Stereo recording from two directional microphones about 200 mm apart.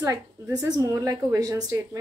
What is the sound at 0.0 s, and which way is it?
A woman's voice, 15° right (ahead or behind).